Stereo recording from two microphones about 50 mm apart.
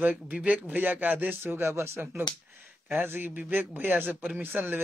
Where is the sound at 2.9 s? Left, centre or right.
Right.